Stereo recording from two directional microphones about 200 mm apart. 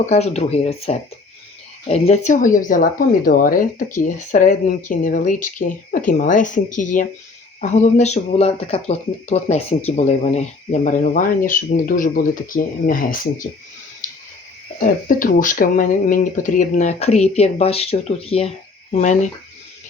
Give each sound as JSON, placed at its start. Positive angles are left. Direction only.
{"t": 0.0, "sound": "speech", "side_deg": 35}
{"t": 14.8, "sound": "speech", "side_deg": 45}